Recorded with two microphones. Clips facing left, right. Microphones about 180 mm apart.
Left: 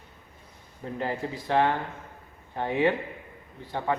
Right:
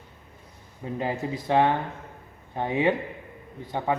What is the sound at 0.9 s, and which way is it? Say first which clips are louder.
Speech: right 2 dB; 15° right (ahead or behind).